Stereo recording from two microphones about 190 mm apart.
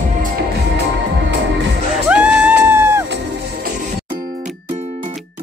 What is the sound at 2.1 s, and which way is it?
Music, 10° right (ahead or behind).